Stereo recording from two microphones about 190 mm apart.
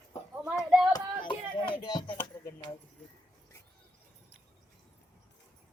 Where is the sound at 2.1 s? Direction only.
10° left (ahead or behind).